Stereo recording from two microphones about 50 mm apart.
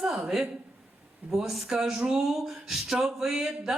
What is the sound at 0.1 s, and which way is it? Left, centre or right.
Speech, centre.